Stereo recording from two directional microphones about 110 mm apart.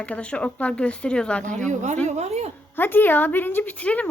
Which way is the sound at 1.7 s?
90° right.